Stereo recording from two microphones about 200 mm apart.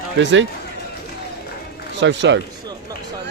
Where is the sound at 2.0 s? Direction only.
65° right (ahead or behind).